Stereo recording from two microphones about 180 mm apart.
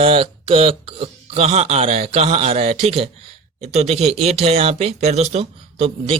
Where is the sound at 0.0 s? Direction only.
30° right (ahead or behind).